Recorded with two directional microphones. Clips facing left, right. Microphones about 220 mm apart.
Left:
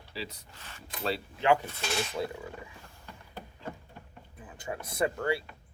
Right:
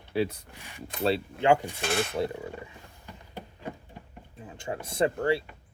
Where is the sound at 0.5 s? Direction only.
15° right (ahead or behind).